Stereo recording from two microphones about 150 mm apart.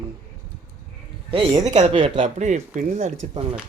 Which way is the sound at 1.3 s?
35° right (ahead or behind).